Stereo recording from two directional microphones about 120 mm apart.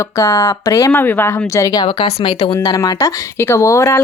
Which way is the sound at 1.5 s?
30° left (ahead or behind).